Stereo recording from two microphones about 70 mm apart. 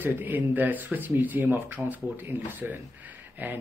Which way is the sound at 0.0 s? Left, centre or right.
Right.